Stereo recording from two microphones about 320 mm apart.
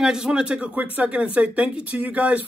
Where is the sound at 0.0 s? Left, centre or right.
Centre.